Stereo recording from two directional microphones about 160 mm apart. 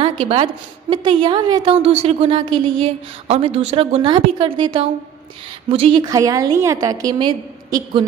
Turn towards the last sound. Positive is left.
turn(degrees=-30)  # may be behind; listen again after turning